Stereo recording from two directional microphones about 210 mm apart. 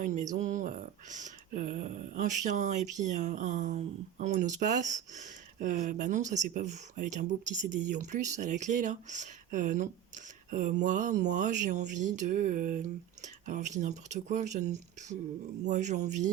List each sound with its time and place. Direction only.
0.0 s speech: 35° right (ahead or behind)